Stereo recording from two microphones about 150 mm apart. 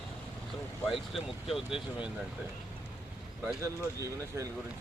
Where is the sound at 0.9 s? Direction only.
Centre (ahead or behind).